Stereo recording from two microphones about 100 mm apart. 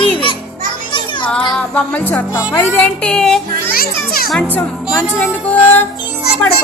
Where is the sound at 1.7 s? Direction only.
15° left (ahead or behind).